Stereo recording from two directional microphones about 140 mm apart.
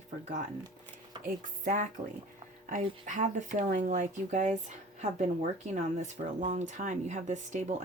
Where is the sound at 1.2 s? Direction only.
70° right (ahead or behind).